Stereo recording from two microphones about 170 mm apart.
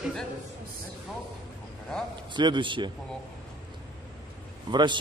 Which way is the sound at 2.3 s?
25° right (ahead or behind).